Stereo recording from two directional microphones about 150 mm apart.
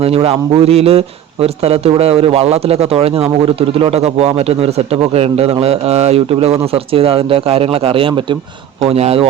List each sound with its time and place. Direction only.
0.0 s speech: 40° right (ahead or behind)